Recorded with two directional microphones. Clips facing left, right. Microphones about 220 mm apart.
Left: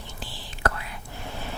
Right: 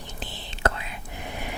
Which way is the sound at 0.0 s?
20° right (ahead or behind).